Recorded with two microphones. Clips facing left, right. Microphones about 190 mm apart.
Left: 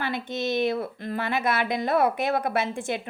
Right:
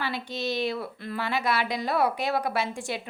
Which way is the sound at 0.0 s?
55° left (ahead or behind).